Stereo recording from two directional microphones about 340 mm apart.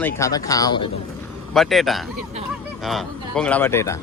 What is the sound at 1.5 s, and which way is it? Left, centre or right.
Speech, centre.